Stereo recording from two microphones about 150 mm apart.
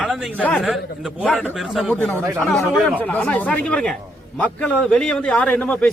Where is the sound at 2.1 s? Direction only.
15° right (ahead or behind).